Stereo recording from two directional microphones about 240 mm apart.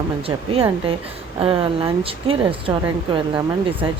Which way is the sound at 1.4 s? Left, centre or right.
Right.